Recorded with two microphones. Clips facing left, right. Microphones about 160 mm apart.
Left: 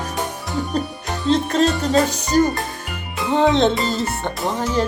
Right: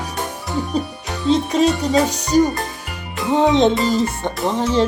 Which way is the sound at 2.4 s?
Centre (ahead or behind).